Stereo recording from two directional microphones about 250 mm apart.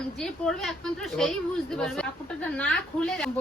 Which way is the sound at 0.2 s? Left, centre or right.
Centre.